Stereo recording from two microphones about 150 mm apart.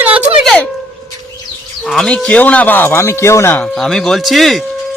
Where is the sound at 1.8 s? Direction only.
5° left (ahead or behind).